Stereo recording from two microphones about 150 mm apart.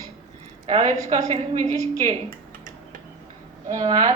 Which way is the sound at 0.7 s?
40° right (ahead or behind).